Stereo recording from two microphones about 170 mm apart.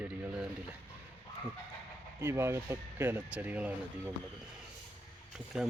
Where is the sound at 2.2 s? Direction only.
15° right (ahead or behind).